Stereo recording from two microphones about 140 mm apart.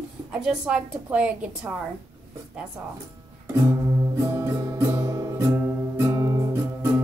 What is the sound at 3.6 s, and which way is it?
Music, 20° right (ahead or behind).